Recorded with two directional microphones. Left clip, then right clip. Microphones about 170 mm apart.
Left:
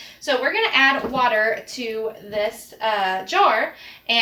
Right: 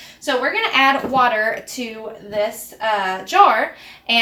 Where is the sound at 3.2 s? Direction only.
15° right (ahead or behind).